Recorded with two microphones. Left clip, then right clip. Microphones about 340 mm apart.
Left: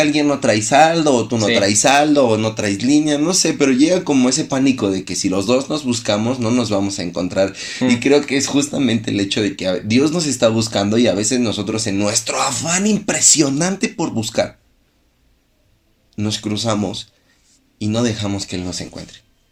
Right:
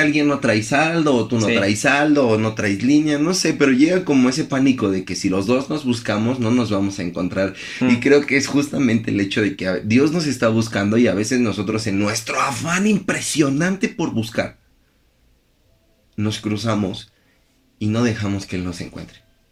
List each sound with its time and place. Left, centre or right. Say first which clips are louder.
0.0 s speech: left 2 dB; centre
16.1 s speech: left 2 dB; centre